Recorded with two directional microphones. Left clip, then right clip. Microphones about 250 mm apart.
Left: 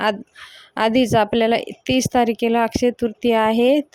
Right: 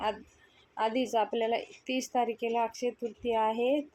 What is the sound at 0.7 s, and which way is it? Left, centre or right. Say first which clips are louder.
Speech: left 12 dB; left.